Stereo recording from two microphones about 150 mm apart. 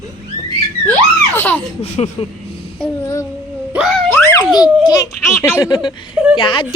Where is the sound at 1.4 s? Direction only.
10° left (ahead or behind).